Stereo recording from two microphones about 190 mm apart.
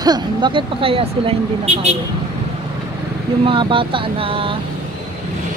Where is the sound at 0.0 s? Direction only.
25° right (ahead or behind).